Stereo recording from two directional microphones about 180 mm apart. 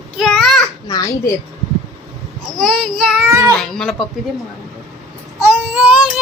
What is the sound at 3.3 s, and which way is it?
Child singing, 15° right (ahead or behind).